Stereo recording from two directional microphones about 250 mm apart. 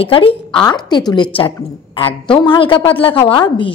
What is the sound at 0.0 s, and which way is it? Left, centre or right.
A woman's voice, left.